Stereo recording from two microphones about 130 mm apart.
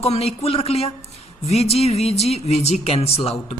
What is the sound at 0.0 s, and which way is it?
Speech, 50° left (ahead or behind).